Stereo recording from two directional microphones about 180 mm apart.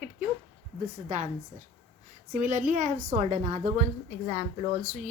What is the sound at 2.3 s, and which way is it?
A woman's voice, 45° right (ahead or behind).